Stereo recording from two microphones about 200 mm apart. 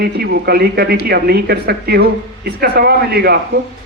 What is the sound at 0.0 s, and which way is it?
Speech, 55° right (ahead or behind).